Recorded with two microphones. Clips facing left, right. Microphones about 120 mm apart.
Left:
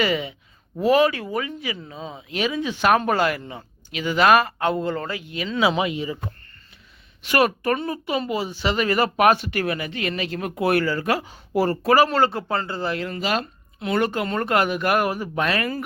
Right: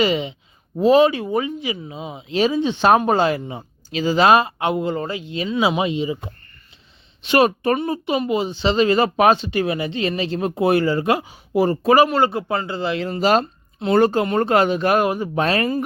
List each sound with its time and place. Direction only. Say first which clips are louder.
0.0 s speech: right 3 dB; 20° right (ahead or behind)
2.3 s speech: right 6 dB; 30° right (ahead or behind)
13.1 s speech: right 7 dB; 35° right (ahead or behind)